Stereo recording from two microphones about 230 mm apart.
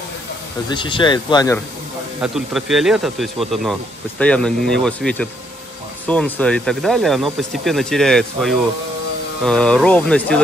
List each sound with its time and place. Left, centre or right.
0.7 s speech: left
2.2 s a man's voice: centre